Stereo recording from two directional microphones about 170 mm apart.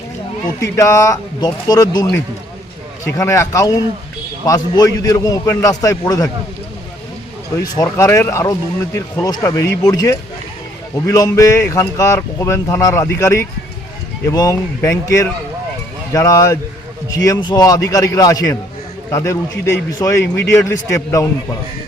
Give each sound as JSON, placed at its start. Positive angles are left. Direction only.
{"t": 0.6, "sound": "a man's voice", "side_deg": 15}
{"t": 7.6, "sound": "a man's voice", "side_deg": 20}